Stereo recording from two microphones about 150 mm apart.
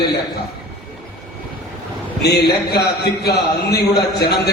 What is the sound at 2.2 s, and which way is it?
A man's voice, 90° left.